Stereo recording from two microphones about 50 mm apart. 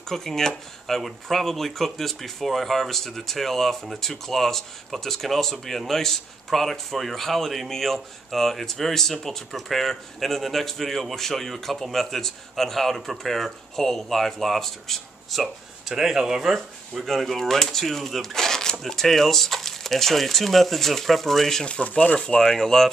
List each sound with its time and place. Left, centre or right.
0.1 s speech: centre
15.4 s speech: centre
17.0 s speech: centre
21.6 s speech: left